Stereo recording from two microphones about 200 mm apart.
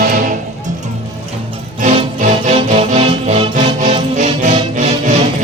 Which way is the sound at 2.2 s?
35° right (ahead or behind).